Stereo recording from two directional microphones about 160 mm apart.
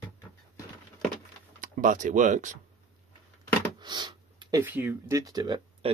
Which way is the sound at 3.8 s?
25° right (ahead or behind).